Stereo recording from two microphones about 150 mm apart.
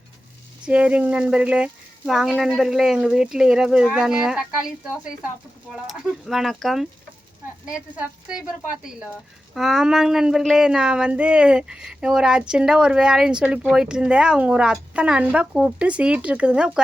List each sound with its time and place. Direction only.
0.6 s speech: 10° right (ahead or behind)
5.7 s speech: 5° right (ahead or behind)